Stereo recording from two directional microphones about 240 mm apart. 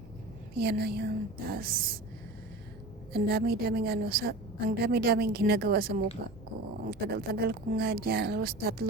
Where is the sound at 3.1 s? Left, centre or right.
Right.